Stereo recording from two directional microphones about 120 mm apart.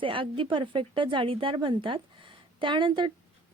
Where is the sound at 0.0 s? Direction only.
45° right (ahead or behind).